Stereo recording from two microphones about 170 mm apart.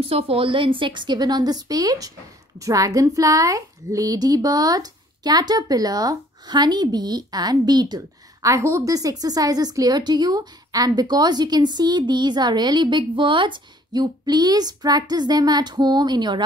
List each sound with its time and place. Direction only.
0.0 s a woman's voice: 35° right (ahead or behind)